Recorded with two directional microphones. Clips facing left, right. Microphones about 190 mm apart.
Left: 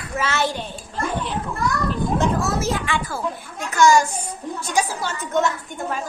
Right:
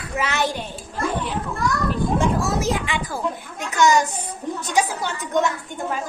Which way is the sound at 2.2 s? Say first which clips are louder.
Even; 15° right (ahead or behind).